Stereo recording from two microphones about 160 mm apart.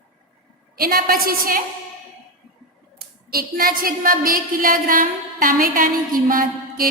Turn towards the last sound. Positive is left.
turn(degrees=-60)  # may be behind; listen again after turning